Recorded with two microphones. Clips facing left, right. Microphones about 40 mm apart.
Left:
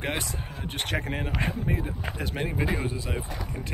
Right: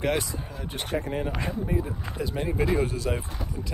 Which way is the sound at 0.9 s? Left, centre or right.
Left.